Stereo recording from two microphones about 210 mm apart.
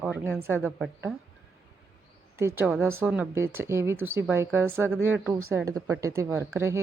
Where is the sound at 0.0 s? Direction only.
10° right (ahead or behind).